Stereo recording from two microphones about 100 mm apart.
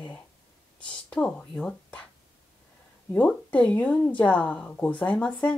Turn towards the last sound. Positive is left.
turn(degrees=10)  # may be behind; listen again after turning